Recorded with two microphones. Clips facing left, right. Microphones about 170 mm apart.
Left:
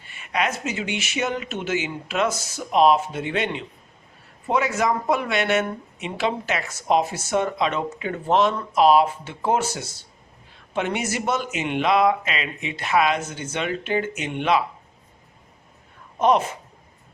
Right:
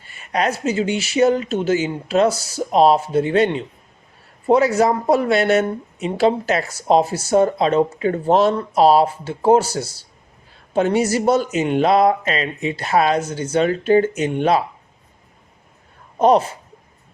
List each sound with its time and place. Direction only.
0.0 s speech: 40° right (ahead or behind)
16.1 s speech: 35° right (ahead or behind)